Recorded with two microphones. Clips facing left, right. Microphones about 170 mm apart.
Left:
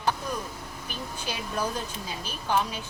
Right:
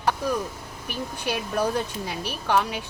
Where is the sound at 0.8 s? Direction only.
65° right (ahead or behind).